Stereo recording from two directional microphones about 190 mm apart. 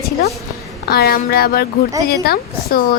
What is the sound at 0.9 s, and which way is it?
A woman's voice, 55° left (ahead or behind).